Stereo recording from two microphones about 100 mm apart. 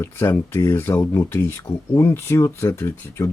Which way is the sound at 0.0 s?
25° left (ahead or behind).